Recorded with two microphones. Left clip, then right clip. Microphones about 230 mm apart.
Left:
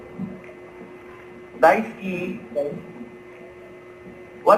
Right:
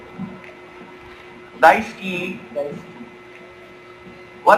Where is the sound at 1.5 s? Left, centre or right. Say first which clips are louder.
Right 3 dB; right.